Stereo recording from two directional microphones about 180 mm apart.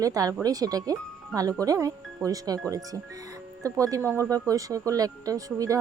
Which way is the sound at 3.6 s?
20° right (ahead or behind).